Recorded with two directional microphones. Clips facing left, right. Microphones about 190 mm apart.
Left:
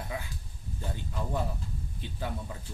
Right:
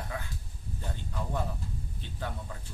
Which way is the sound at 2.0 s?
10° left (ahead or behind).